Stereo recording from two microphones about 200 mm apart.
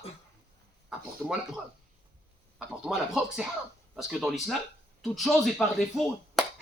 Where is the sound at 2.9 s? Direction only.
Centre (ahead or behind).